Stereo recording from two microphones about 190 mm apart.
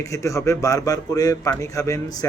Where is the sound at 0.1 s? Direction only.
15° left (ahead or behind).